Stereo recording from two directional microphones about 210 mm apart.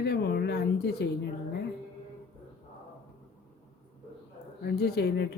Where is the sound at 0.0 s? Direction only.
50° left (ahead or behind).